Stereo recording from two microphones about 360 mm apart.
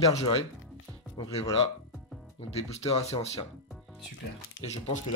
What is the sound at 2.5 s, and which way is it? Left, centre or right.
Speech, centre.